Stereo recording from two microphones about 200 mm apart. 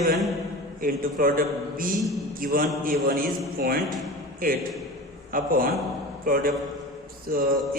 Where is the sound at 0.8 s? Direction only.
45° right (ahead or behind).